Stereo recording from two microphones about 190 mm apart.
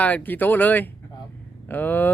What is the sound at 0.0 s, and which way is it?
Speech, 10° left (ahead or behind).